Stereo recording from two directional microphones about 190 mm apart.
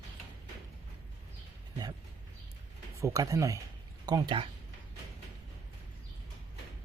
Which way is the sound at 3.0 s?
15° right (ahead or behind).